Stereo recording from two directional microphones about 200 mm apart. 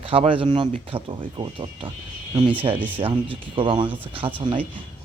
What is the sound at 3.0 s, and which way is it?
Speech, 25° right (ahead or behind).